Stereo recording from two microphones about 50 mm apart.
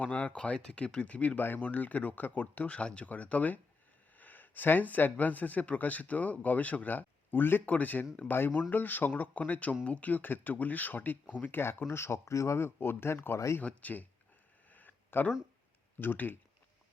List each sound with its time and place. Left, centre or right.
0.0 s speech: left
0.3 s speech: centre
1.4 s speech: left
11.6 s speech: left
12.5 s speech: left
13.6 s speech: left
14.7 s a sound: left
16.0 s speech: left